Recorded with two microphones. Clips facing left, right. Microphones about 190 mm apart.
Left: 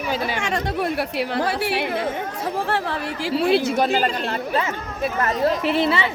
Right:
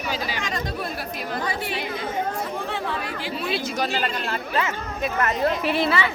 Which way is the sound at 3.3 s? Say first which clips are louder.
Left 9 dB; 70° left (ahead or behind).